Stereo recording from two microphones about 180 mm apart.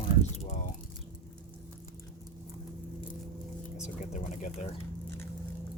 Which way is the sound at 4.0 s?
45° left (ahead or behind).